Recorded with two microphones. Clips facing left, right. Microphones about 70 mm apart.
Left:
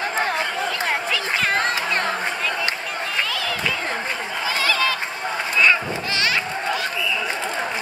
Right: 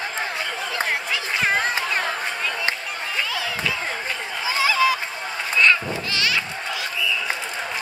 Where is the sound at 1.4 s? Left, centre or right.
Centre.